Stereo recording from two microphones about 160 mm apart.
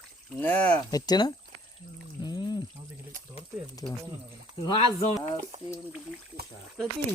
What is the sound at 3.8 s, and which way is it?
Speech, 30° left (ahead or behind).